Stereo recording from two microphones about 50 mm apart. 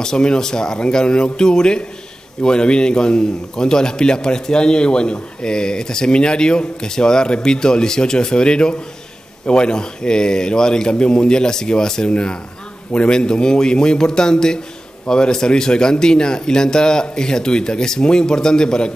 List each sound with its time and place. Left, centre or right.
0.0 s a man's voice: centre